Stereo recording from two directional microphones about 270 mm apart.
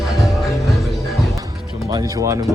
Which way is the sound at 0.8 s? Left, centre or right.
Centre.